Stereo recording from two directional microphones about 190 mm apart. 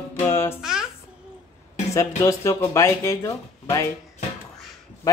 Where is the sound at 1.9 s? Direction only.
15° left (ahead or behind).